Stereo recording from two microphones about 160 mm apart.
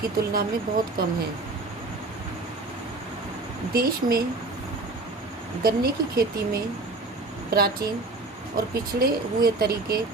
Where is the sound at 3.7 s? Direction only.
70° right (ahead or behind).